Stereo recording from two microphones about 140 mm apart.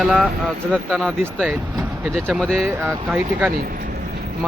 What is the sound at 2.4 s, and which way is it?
Speech, 5° left (ahead or behind).